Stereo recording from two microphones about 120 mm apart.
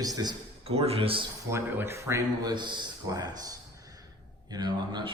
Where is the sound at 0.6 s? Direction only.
55° right (ahead or behind).